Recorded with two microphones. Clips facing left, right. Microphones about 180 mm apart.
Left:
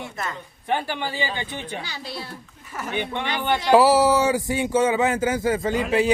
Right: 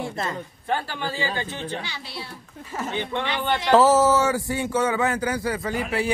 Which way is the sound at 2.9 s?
15° left (ahead or behind).